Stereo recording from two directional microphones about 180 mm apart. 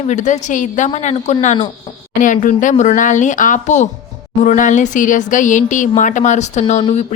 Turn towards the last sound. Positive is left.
turn(degrees=35)  # may be behind; listen again after turning